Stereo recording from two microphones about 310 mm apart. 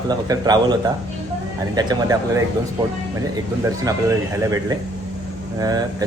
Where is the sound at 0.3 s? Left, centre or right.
Centre.